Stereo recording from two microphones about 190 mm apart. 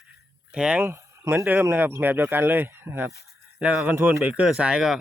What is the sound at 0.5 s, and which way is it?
A man's voice, 5° right (ahead or behind).